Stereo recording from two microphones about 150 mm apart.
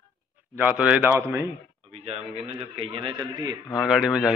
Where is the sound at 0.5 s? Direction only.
10° right (ahead or behind).